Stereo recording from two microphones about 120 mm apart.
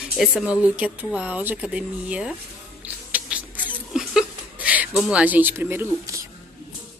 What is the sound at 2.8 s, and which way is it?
Rodents, 15° right (ahead or behind).